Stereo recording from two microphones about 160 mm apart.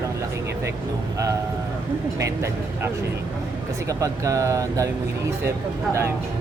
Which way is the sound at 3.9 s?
20° right (ahead or behind).